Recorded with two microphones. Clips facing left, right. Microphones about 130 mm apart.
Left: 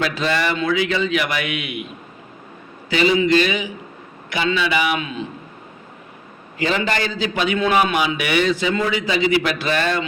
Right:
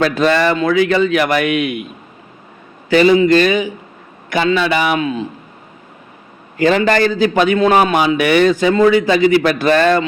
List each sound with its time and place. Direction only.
0.0 s a man's voice: 50° right (ahead or behind)
2.9 s a man's voice: 45° right (ahead or behind)
6.6 s a man's voice: 50° right (ahead or behind)